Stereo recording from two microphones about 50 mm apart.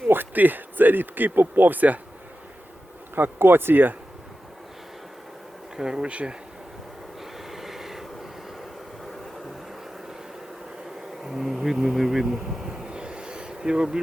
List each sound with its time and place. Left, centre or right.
0.1 s speech: right
3.2 s speech: right
5.7 s bee: centre
7.2 s train: centre
11.2 s speech: centre